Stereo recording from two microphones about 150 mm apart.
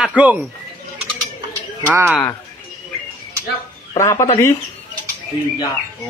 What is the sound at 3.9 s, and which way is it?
Speech, 20° left (ahead or behind).